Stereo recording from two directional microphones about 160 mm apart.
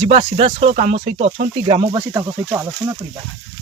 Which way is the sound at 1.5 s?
30° right (ahead or behind).